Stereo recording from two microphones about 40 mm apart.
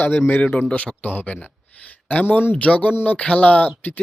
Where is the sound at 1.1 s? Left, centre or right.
Left.